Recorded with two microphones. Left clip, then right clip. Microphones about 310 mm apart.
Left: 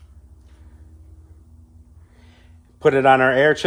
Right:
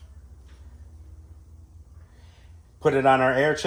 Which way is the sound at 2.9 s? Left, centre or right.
Left.